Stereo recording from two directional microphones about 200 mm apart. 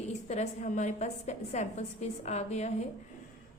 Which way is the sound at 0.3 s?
35° left (ahead or behind).